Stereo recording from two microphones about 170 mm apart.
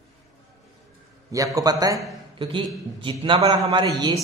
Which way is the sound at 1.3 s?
20° right (ahead or behind).